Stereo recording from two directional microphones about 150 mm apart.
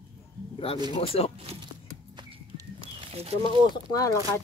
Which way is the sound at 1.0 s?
40° left (ahead or behind).